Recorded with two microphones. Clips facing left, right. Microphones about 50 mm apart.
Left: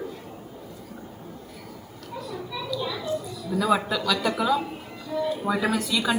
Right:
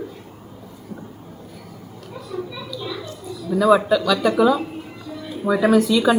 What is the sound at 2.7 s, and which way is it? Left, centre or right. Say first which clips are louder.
Children playing: left 1 dB; centre.